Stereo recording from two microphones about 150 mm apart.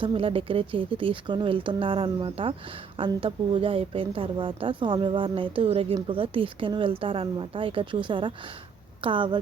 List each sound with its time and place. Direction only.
0.0 s a woman's voice: 35° right (ahead or behind)